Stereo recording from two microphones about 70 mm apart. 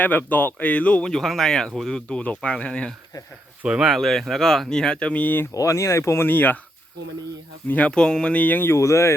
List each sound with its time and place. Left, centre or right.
0.0 s speech: left
1.1 s speech: centre
3.6 s speech: centre
3.8 s speech: centre; by 5.5 s left
5.5 s speech: left
6.2 s speech: left
7.7 s speech: centre
8.7 s speech: left